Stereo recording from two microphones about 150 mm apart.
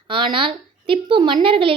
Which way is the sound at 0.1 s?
35° right (ahead or behind).